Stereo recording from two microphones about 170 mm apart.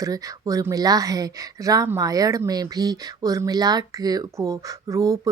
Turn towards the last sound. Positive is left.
turn(degrees=-20)  # may be behind; listen again after turning